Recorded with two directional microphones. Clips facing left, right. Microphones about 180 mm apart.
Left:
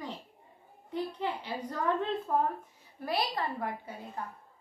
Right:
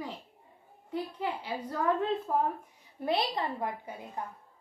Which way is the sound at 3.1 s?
20° right (ahead or behind).